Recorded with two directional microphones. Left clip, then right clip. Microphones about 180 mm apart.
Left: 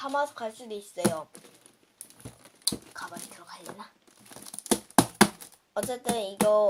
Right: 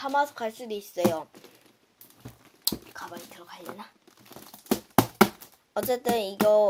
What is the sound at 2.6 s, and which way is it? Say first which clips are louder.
Dog: even; 30° right (ahead or behind).